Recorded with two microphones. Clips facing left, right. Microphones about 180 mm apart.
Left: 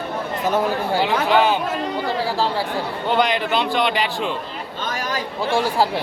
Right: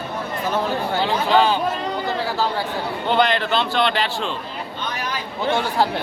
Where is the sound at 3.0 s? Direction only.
10° left (ahead or behind).